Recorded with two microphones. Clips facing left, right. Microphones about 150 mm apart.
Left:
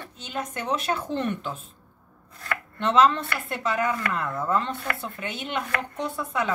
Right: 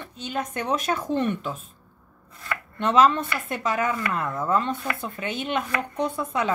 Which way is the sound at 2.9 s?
15° right (ahead or behind).